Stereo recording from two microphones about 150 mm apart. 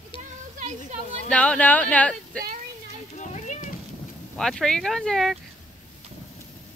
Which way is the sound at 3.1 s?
55° left (ahead or behind).